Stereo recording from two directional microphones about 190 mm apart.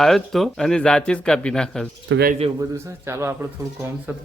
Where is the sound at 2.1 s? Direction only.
80° right.